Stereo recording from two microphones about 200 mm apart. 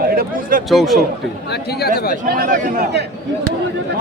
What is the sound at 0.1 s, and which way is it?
Speech, 45° right (ahead or behind).